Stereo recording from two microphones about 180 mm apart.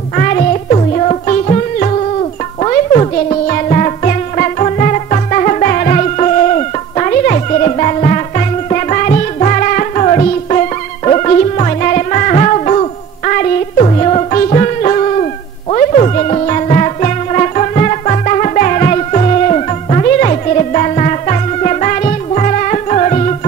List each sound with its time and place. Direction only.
0.1 s music: 45° left (ahead or behind)
0.5 s music: 35° left (ahead or behind)